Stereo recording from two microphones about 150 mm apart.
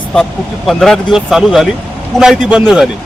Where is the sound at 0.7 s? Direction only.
Centre (ahead or behind).